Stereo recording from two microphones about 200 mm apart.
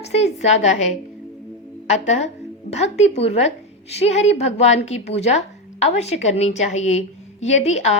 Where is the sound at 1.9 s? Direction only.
35° left (ahead or behind).